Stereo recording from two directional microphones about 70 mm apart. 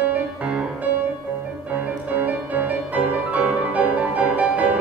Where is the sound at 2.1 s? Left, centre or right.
Right.